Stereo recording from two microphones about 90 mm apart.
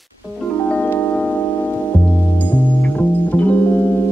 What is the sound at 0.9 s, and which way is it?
Singing bowl, 25° left (ahead or behind).